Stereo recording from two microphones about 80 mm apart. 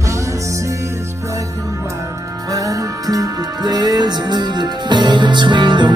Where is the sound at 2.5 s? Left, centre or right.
Right.